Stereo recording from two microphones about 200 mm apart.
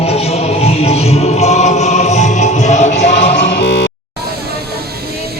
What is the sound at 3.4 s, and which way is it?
Music, 60° left (ahead or behind).